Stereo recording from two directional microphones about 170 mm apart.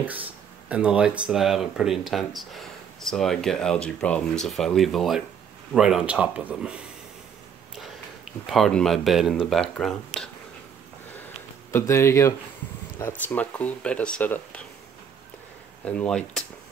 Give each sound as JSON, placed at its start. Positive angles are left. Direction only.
{"t": 0.0, "sound": "speech", "side_deg": -10}
{"t": 11.7, "sound": "speech", "side_deg": 15}
{"t": 15.8, "sound": "speech", "side_deg": 5}